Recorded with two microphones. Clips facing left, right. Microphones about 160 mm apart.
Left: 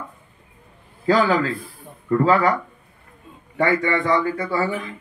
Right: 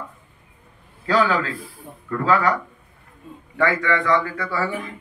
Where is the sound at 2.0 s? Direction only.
25° left (ahead or behind).